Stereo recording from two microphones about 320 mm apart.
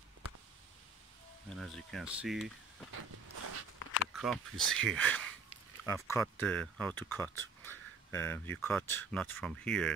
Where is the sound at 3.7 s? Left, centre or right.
Left.